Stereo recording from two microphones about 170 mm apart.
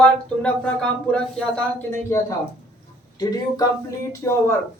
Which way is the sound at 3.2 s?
25° left (ahead or behind).